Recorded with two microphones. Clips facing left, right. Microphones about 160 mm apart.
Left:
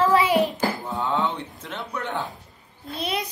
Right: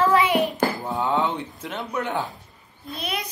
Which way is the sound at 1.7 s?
10° right (ahead or behind).